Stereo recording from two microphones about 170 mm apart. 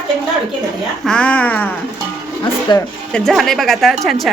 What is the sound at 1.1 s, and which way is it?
Speech, 5° left (ahead or behind).